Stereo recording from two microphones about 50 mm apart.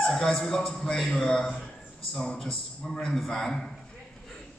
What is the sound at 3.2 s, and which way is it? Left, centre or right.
Speech, centre.